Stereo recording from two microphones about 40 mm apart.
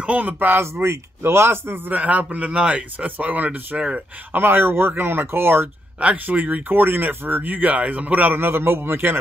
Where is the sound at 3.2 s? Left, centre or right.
Right.